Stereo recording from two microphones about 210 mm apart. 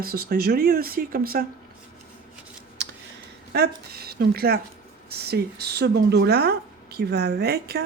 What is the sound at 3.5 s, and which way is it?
Speech, 50° right (ahead or behind).